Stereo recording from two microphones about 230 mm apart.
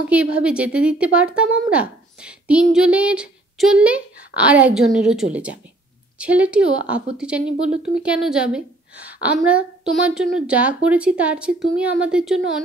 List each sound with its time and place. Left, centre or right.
0.1 s a woman's voice: centre
1.7 s a sound: centre
2.7 s a woman's voice: centre